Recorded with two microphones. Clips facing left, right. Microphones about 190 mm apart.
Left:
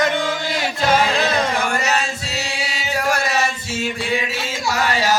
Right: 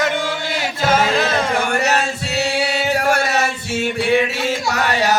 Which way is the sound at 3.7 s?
65° right (ahead or behind).